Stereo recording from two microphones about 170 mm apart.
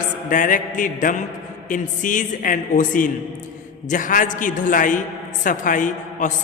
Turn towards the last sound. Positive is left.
turn(degrees=50)  # may be behind; listen again after turning